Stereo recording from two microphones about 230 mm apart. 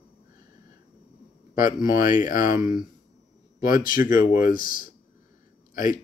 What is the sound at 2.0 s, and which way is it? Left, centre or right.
Speech, left.